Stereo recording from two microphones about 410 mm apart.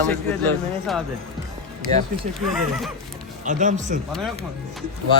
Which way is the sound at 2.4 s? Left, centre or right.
Centre.